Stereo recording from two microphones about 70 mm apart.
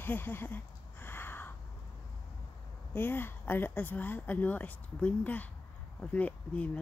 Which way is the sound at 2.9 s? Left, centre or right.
Left.